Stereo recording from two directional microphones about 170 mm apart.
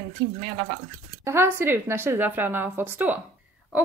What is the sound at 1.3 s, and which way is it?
A woman's voice, 15° right (ahead or behind).